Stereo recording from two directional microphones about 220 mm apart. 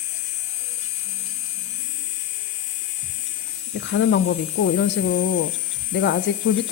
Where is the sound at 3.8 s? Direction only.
55° left (ahead or behind).